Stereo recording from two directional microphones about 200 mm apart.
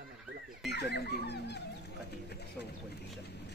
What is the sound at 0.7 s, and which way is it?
Speech, 55° left (ahead or behind).